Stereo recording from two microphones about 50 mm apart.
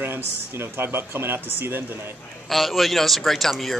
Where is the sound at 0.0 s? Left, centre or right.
Right.